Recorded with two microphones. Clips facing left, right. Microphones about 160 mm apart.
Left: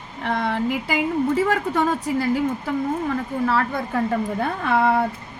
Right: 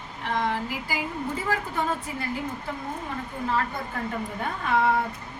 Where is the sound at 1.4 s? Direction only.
75° left (ahead or behind).